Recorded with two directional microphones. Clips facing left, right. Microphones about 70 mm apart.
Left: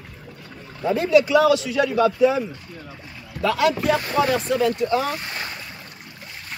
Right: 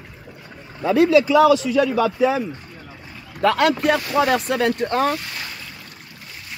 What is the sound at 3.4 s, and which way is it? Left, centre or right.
Speech, right.